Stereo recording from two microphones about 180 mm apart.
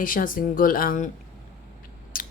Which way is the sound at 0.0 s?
50° left (ahead or behind).